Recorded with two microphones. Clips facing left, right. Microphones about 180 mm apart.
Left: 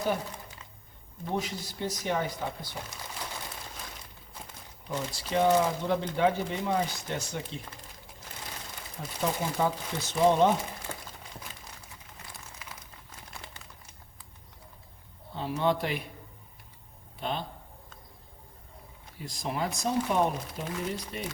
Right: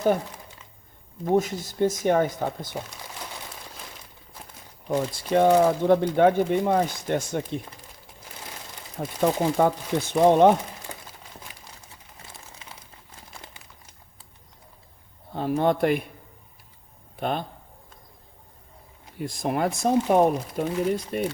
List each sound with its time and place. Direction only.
1.2 s speech: 45° right (ahead or behind)
4.9 s speech: 55° right (ahead or behind)
9.0 s speech: 55° right (ahead or behind)
10.9 s crumpling: 15° right (ahead or behind)
12.5 s crumpling: 30° right (ahead or behind)
15.3 s speech: 50° right (ahead or behind)
17.2 s speech: 55° right (ahead or behind)
19.2 s speech: 55° right (ahead or behind)